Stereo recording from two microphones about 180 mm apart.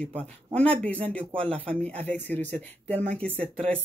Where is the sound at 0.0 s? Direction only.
5° left (ahead or behind).